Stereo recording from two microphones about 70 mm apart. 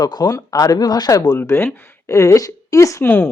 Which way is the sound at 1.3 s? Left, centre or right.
Left.